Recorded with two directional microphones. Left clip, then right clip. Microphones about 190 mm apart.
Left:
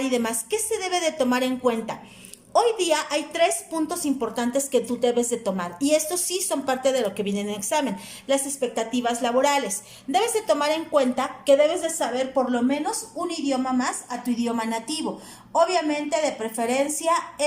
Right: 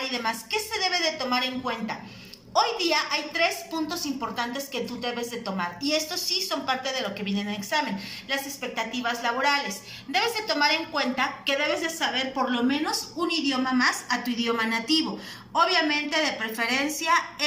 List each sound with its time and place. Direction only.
0.1 s a woman's voice: 55° left (ahead or behind); by 16.8 s 30° left (ahead or behind)